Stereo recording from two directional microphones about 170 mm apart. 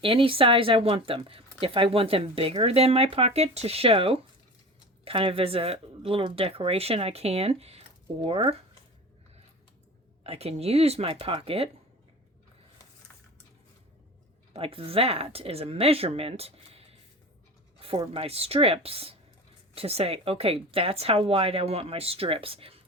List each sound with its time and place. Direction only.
0.0 s speech: 30° right (ahead or behind)
10.2 s speech: 35° right (ahead or behind)
14.5 s speech: 35° right (ahead or behind)